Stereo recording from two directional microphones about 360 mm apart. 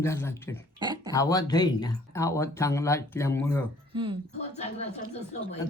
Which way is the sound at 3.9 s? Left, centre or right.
Centre.